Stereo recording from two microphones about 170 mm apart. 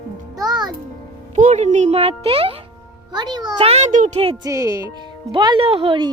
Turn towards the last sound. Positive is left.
turn(degrees=-30)  # may be behind; listen again after turning